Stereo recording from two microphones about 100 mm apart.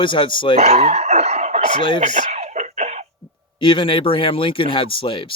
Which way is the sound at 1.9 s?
90° right.